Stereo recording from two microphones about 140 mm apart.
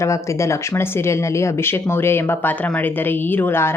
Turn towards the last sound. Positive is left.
turn(degrees=15)  # may be behind; listen again after turning